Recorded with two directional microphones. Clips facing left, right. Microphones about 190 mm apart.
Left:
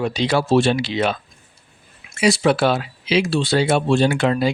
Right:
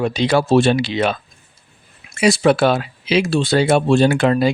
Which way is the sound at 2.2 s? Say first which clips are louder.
Right 3 dB; 50° right (ahead or behind).